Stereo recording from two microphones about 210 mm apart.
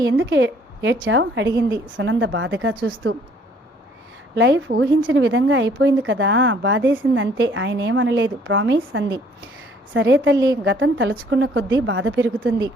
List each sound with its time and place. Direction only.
0.0 s a woman's voice: 60° right (ahead or behind)
4.4 s a woman's voice: 60° right (ahead or behind)